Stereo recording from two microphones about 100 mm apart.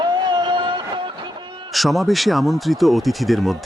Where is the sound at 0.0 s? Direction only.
55° right (ahead or behind).